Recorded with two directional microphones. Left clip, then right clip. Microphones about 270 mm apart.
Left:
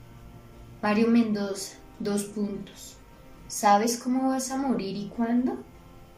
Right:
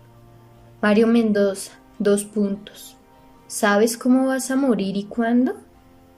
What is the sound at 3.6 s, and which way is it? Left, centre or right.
A woman's voice, right.